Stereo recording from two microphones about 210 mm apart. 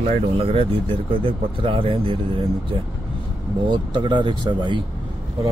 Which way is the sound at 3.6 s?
20° right (ahead or behind).